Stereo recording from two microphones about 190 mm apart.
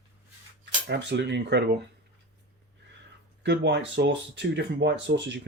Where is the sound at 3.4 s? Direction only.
65° right (ahead or behind).